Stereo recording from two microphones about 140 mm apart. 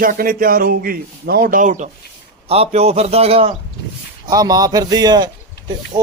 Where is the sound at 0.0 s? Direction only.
90° right; by 1.9 s 60° right (ahead or behind).